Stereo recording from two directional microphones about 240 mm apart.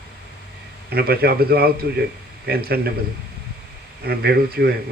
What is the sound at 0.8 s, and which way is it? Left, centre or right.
Speech, right.